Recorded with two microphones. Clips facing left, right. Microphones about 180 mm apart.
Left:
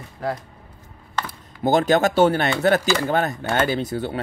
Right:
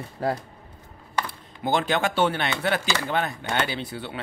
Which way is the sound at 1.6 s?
40° left (ahead or behind).